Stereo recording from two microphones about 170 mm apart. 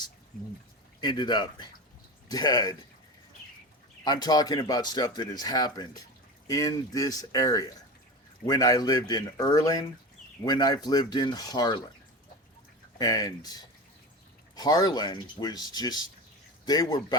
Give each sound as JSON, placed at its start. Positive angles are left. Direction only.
{"t": 1.0, "sound": "speech", "side_deg": 25}
{"t": 4.0, "sound": "speech", "side_deg": 25}
{"t": 13.0, "sound": "speech", "side_deg": 20}